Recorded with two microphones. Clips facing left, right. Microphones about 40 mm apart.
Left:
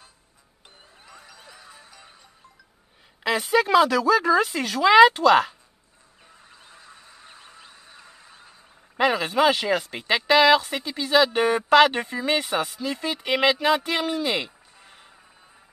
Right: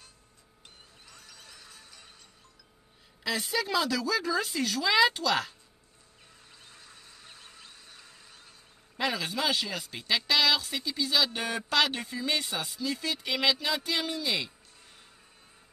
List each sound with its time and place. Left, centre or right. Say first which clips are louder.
1.0 s music: left 6 dB; centre
3.3 s speech: left 10 dB; left
6.5 s honk: left 5 dB; centre
8.9 s speech: left 9 dB; left
14.8 s music: left 7 dB; left